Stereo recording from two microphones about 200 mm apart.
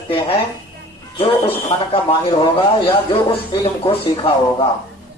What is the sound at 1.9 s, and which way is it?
Mantra, 25° left (ahead or behind).